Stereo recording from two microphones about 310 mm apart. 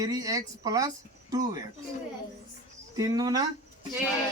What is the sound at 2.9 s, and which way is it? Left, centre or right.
Speech, centre.